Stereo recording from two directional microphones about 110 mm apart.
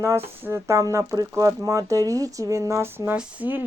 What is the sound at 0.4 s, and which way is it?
Speech, 25° right (ahead or behind).